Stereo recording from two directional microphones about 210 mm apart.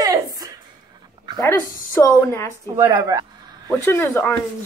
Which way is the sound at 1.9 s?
10° left (ahead or behind).